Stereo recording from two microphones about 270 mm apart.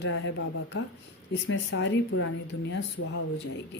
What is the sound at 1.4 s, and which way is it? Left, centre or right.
Speech, left.